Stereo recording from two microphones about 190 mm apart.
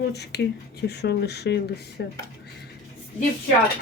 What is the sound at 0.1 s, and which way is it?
A woman's voice, 60° left (ahead or behind).